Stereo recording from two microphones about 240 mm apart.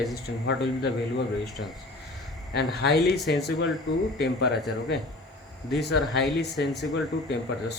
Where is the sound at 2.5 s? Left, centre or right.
Left.